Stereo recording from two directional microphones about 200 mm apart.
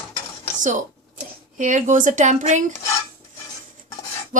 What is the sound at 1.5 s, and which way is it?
A woman's voice, 40° right (ahead or behind).